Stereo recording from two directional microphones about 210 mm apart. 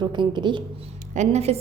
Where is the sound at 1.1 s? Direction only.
35° right (ahead or behind).